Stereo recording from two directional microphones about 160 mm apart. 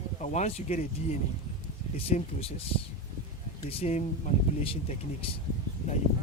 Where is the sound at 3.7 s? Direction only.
40° left (ahead or behind).